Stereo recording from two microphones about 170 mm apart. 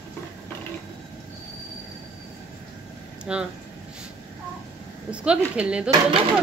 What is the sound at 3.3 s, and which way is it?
Speech, 5° right (ahead or behind).